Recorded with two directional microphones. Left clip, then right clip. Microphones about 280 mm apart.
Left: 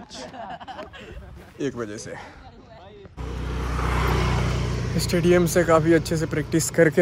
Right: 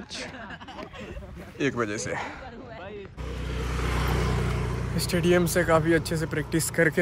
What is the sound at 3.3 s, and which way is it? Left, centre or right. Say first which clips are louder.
Vehicle: left 3 dB; centre.